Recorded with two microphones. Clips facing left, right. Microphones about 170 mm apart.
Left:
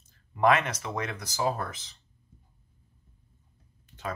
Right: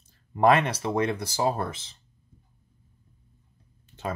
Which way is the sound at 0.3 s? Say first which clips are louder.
Right 3 dB; 30° right (ahead or behind).